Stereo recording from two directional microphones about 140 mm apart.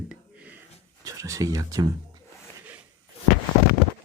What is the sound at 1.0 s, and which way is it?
Speech, 25° right (ahead or behind).